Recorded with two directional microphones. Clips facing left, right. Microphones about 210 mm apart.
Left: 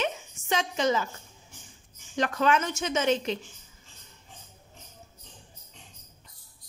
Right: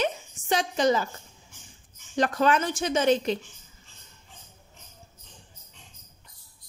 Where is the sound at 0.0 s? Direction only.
35° right (ahead or behind).